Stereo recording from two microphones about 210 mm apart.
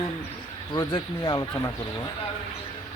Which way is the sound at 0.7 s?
20° left (ahead or behind).